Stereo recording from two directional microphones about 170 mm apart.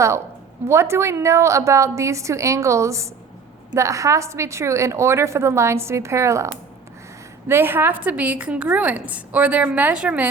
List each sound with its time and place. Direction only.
0.7 s a woman's voice: 15° right (ahead or behind)